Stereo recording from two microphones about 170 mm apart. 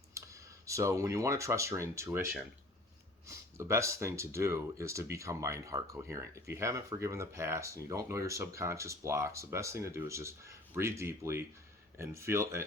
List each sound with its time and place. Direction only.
0.2 s computer keyboard: 15° right (ahead or behind)
0.6 s speech: 20° right (ahead or behind)
3.2 s speech: 15° right (ahead or behind)